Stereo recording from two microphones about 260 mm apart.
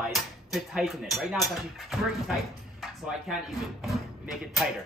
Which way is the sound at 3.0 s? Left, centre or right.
Centre.